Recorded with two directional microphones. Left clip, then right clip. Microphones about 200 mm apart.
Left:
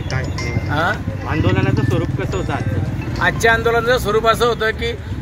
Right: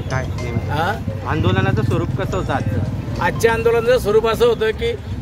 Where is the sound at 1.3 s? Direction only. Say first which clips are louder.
Even; 45° right (ahead or behind).